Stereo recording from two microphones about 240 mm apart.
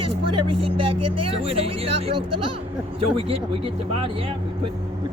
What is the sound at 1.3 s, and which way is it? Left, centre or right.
Speech, right.